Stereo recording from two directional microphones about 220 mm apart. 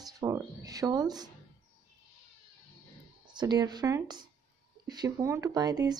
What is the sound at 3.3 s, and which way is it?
A woman's voice, 20° right (ahead or behind).